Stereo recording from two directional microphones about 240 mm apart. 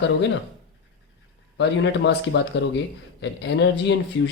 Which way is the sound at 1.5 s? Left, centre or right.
Left.